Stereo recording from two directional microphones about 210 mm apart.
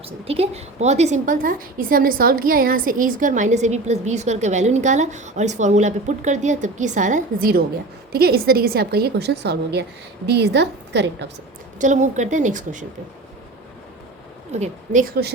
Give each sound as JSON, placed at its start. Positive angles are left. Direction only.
{"t": 0.3, "sound": "a woman's voice", "side_deg": -30}
{"t": 11.8, "sound": "a woman's voice", "side_deg": -35}
{"t": 14.5, "sound": "a woman's voice", "side_deg": -35}